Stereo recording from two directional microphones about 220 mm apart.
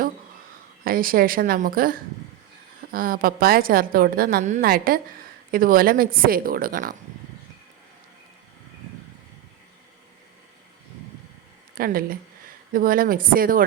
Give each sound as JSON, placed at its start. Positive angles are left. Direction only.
{"t": 0.9, "sound": "a woman's voice", "side_deg": -40}
{"t": 11.7, "sound": "a woman's voice", "side_deg": -40}